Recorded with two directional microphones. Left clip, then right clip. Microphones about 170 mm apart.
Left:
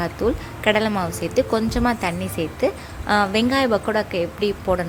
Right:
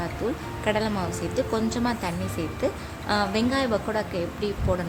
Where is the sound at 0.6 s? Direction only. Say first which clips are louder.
Left 7 dB; 25° left (ahead or behind).